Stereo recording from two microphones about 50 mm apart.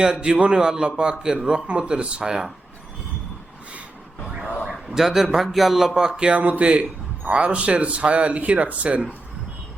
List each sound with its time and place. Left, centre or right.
0.0 s speech: centre
4.6 s speech: centre; by 9.0 s right